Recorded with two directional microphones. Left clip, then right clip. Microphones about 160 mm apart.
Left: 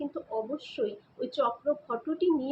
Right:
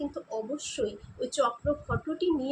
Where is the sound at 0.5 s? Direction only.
Centre (ahead or behind).